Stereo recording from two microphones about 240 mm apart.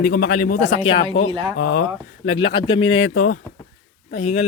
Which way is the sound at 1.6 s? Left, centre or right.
Left.